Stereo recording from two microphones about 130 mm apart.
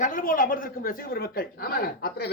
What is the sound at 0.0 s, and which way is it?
A woman's voice, 90° left.